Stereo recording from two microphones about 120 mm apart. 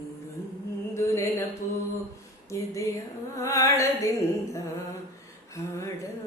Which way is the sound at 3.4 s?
25° left (ahead or behind).